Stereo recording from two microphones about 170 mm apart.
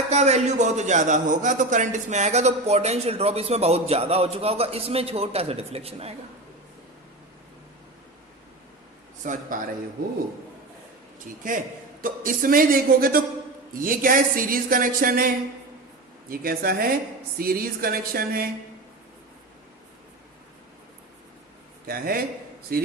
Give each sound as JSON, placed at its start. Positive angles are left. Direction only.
{"t": 0.1, "sound": "a man's voice", "side_deg": -40}
{"t": 9.2, "sound": "a man's voice", "side_deg": -50}
{"t": 12.0, "sound": "speech", "side_deg": -55}
{"t": 16.3, "sound": "speech", "side_deg": -60}
{"t": 21.8, "sound": "speech", "side_deg": -60}